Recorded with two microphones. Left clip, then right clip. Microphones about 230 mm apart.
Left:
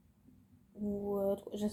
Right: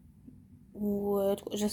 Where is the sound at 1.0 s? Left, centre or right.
Right.